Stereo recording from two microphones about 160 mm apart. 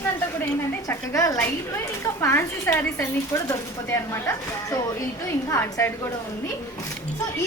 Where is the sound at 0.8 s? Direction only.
20° left (ahead or behind).